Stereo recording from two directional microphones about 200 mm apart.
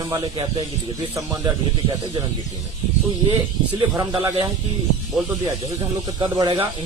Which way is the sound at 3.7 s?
25° right (ahead or behind).